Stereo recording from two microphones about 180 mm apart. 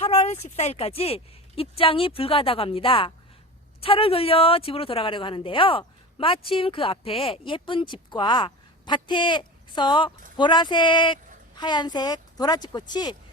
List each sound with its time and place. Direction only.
0.0 s a woman's voice: 35° left (ahead or behind)